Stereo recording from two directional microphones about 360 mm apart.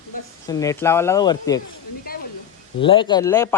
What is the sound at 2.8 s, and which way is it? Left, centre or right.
Speech, centre.